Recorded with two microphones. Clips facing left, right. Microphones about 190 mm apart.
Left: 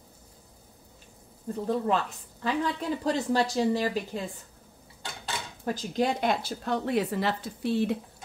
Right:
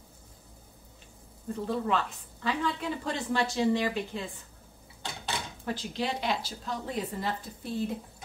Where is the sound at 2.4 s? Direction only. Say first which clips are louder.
Left 2 dB; 40° left (ahead or behind).